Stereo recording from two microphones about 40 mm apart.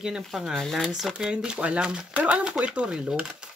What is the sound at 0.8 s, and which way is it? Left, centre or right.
Speech, centre.